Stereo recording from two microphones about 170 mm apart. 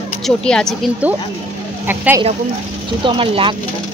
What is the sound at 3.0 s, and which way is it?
Speech, 30° right (ahead or behind).